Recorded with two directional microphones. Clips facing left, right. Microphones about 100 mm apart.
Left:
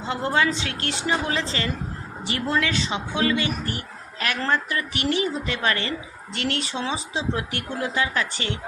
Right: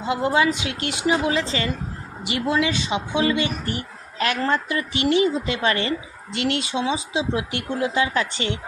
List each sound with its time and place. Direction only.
0.0 s speech: 10° right (ahead or behind)